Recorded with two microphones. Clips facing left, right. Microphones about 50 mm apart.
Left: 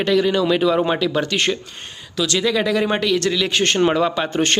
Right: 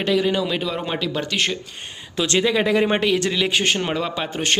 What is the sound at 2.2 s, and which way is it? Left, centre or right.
Speech, right.